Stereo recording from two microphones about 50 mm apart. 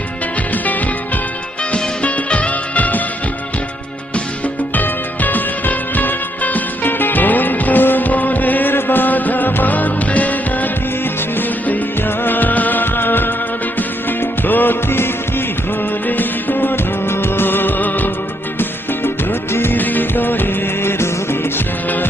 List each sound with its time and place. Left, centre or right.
0.5 s music: left
4.7 s music: left
11.3 s music: left
16.0 s music: left
19.5 s music: left
19.8 s music: left